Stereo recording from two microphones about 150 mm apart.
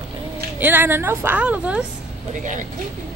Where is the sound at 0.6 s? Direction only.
15° right (ahead or behind).